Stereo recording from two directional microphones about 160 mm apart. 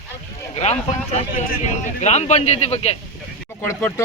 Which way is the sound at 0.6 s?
45° left (ahead or behind).